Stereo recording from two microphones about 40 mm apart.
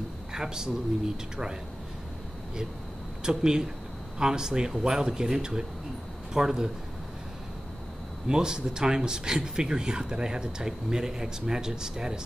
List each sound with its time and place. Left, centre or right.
0.3 s speech: centre
3.3 s speech: centre
8.3 s speech: centre